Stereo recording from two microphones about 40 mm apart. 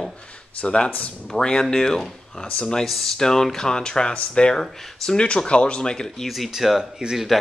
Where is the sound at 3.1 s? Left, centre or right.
Centre.